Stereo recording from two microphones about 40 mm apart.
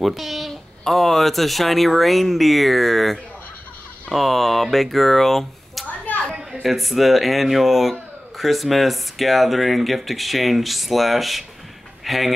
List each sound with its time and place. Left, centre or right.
0.0 s speech: centre
6.1 s a sound: left
6.5 s speech: centre